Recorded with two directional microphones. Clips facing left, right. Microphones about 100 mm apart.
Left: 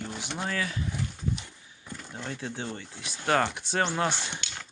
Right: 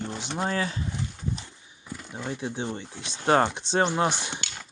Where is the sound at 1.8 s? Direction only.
10° right (ahead or behind).